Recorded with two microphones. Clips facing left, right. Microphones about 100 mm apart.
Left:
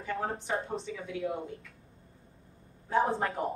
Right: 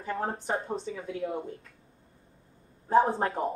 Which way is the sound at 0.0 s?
30° right (ahead or behind).